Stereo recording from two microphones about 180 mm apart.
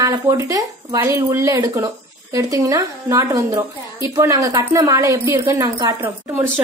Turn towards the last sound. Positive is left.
turn(degrees=-15)  # may be behind; listen again after turning